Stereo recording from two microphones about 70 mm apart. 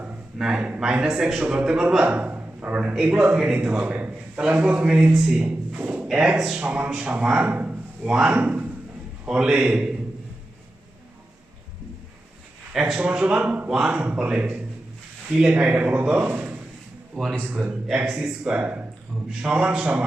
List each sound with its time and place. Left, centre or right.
0.3 s a man's voice: centre
2.0 s a man's voice: right
5.8 s a sound: right
6.1 s a man's voice: centre
8.4 s a man's voice: right
9.2 s a man's voice: centre
13.0 s a man's voice: centre
17.2 s speech: centre
18.1 s a man's voice: centre